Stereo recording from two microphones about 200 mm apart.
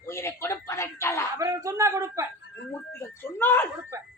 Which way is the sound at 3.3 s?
10° left (ahead or behind).